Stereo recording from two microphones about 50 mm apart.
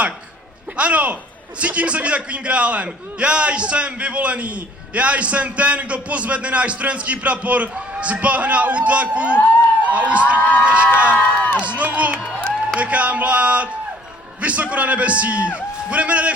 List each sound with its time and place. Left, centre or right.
0.8 s a man's voice: right
9.3 s a sound: left
9.9 s a man's voice: right
10.3 s crowd: left
10.9 s a man's voice: right
11.2 s speech: left
11.6 s a man's voice: right
12.2 s a sound: left
12.7 s a man's voice: right